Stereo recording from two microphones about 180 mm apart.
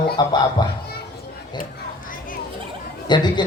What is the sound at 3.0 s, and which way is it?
Speech, 25° left (ahead or behind).